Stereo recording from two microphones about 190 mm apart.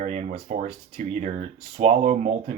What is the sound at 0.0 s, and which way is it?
Speech, 40° right (ahead or behind).